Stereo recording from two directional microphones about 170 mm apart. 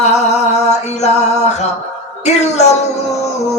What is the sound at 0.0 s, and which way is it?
Music, 40° left (ahead or behind).